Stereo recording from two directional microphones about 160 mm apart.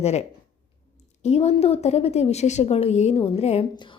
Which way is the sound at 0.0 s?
40° left (ahead or behind).